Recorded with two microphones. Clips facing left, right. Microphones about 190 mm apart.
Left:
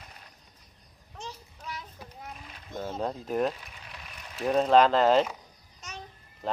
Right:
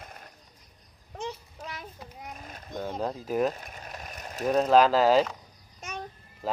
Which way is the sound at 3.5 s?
45° right (ahead or behind).